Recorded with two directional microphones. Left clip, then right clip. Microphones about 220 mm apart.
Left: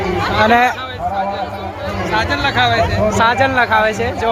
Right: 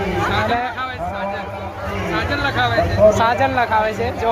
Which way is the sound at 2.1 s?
35° left (ahead or behind).